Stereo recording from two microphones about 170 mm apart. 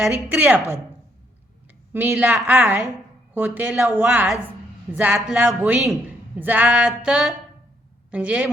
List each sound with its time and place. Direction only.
0.0 s a woman's voice: 10° right (ahead or behind)
1.9 s a woman's voice: 10° right (ahead or behind)
6.4 s a sound: 10° right (ahead or behind)
8.1 s a woman's voice: 5° right (ahead or behind)